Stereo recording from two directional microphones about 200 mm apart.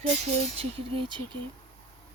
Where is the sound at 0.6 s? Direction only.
25° right (ahead or behind).